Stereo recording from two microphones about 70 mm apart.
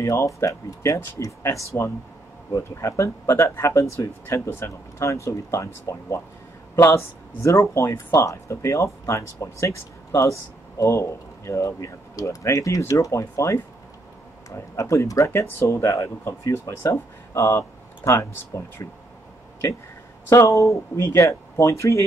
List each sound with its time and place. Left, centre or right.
0.0 s speech: left
14.8 s speech: left
17.6 s a sound: left
18.2 s speech: left
20.2 s speech: left